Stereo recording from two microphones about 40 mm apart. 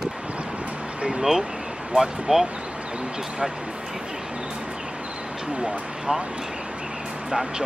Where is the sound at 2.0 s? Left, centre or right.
Centre.